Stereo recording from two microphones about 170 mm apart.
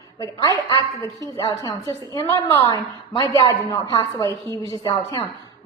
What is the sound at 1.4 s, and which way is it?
A woman's voice, 25° left (ahead or behind).